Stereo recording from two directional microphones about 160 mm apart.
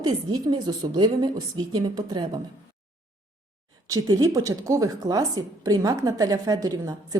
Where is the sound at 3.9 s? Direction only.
25° right (ahead or behind).